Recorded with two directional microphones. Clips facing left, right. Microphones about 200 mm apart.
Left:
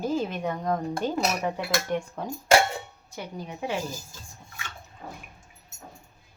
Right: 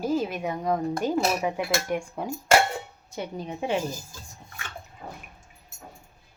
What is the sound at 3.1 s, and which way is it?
Speech, 20° right (ahead or behind).